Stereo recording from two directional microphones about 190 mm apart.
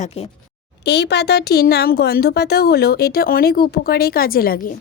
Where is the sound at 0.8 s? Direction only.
60° left (ahead or behind).